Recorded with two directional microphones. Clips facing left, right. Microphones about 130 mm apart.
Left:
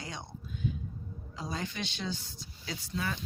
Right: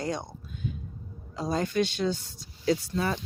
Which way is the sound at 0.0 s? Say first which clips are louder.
Right 11 dB; 45° right (ahead or behind).